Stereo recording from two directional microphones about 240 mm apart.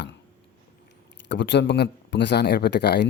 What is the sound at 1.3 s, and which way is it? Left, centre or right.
A man's voice, left.